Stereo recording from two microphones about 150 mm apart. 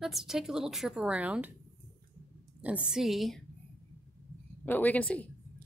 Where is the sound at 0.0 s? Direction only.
Centre (ahead or behind).